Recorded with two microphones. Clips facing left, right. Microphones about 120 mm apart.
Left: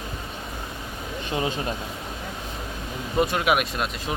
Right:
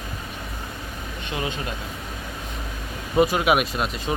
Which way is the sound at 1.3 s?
30° left (ahead or behind).